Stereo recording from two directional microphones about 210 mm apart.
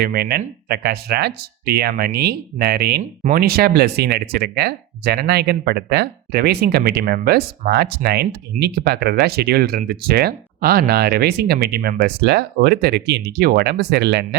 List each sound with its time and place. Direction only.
0.0 s speech: 50° right (ahead or behind)
3.0 s speech: 40° right (ahead or behind)